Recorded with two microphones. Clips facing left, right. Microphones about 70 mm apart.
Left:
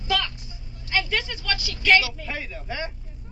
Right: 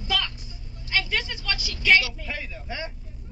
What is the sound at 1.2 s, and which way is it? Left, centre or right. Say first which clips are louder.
Speech: left 2 dB; centre.